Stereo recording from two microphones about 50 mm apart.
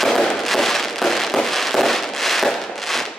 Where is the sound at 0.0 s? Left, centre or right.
Centre.